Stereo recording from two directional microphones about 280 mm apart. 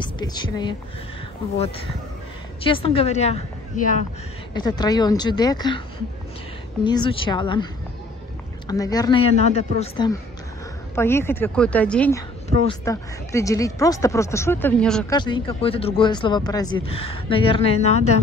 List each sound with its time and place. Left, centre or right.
0.0 s speech: centre
2.6 s speech: centre
6.8 s speech: centre
11.0 s speech: centre
15.1 s speech: centre